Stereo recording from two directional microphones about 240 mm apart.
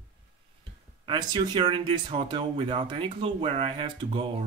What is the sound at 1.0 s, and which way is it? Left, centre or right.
Speech, centre.